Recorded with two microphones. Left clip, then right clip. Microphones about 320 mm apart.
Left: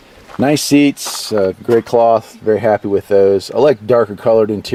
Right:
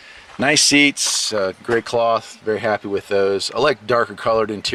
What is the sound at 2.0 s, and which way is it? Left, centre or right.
Speech, centre.